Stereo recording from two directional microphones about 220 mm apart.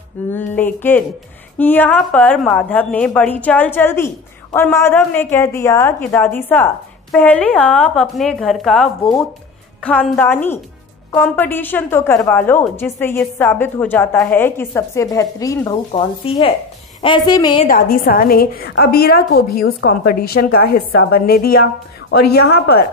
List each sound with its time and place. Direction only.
0.3 s a woman's voice: 10° left (ahead or behind)
17.6 s a woman's voice: 40° left (ahead or behind)